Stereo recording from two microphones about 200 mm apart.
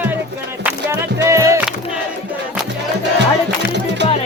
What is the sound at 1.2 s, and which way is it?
Music, 15° right (ahead or behind).